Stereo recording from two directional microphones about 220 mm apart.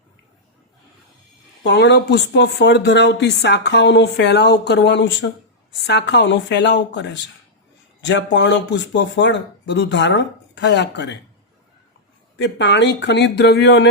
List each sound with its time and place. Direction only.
1.6 s speech: 50° left (ahead or behind)
12.4 s speech: 55° left (ahead or behind)